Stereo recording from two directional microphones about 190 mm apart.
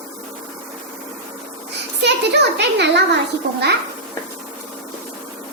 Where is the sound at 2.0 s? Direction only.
65° right (ahead or behind).